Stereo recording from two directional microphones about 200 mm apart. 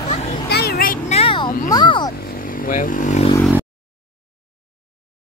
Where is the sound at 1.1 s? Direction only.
25° left (ahead or behind).